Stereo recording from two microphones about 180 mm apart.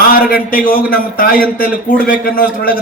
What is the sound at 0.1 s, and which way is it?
A man's voice, 50° left (ahead or behind).